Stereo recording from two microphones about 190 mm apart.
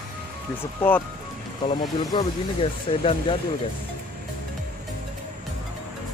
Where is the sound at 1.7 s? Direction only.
25° left (ahead or behind).